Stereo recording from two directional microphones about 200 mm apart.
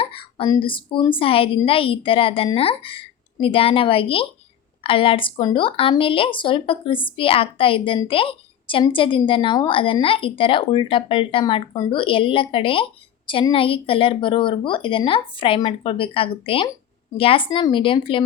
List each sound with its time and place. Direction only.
0.0 s speech: 25° left (ahead or behind)